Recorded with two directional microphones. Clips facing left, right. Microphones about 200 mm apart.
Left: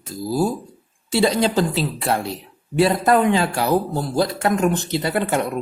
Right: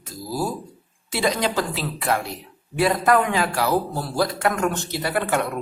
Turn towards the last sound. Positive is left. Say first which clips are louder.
# left 2 dB
turn(degrees=25)  # may be behind; listen again after turning